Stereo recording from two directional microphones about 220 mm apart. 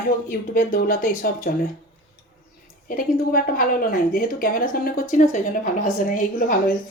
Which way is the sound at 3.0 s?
40° left (ahead or behind).